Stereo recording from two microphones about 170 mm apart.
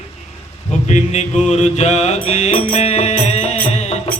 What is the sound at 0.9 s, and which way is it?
A man's voice, 45° left (ahead or behind).